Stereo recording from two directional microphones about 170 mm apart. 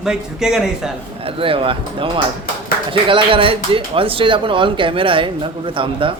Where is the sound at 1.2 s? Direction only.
35° right (ahead or behind).